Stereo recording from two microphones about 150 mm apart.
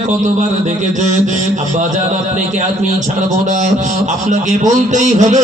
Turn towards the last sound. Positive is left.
turn(degrees=-50)  # may be behind; listen again after turning